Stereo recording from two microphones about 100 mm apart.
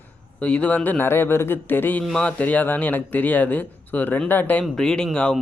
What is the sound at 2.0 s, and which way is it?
Speech, 5° left (ahead or behind).